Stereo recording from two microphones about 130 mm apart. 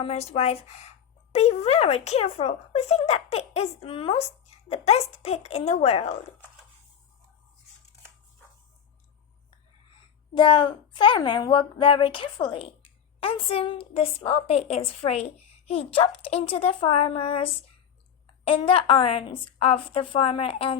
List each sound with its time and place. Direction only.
0.0 s a woman's voice: 55° left (ahead or behind)
10.3 s a woman's voice: 40° left (ahead or behind)